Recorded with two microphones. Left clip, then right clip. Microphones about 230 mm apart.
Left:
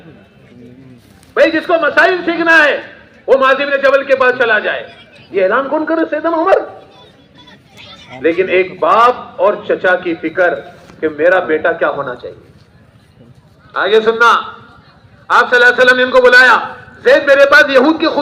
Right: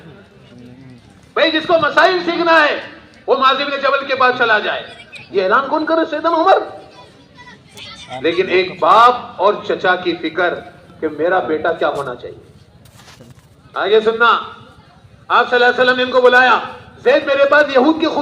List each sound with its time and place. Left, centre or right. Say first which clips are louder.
1.3 s a man's voice: left 3 dB; right
8.2 s a man's voice: left 3 dB; right
11.0 s a man's voice: left 5 dB; right
13.7 s a man's voice: left 3 dB; right